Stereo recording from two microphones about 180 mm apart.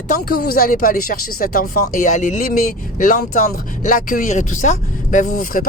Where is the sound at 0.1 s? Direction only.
55° left (ahead or behind).